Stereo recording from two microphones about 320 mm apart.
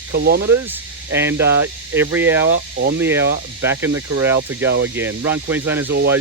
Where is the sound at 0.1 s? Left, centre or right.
Right.